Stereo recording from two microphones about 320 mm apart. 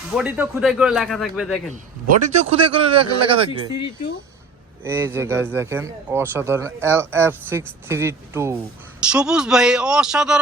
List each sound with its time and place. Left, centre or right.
0.1 s speech: centre
1.7 s a man's voice: right
3.7 s speech: left
4.8 s a man's voice: centre